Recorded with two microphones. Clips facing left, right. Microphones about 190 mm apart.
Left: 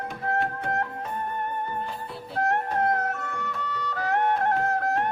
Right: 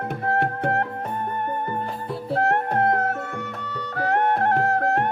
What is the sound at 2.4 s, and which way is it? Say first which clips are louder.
Music: right 2 dB; 60° right (ahead or behind).